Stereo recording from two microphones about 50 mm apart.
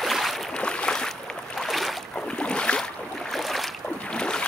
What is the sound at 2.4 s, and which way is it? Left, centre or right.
Boat, left.